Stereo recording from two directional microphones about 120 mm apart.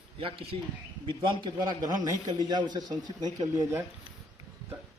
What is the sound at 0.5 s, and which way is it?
A man's voice, 50° right (ahead or behind).